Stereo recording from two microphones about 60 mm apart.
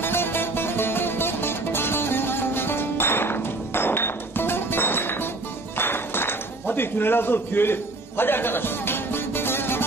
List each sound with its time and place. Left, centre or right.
0.0 s music: left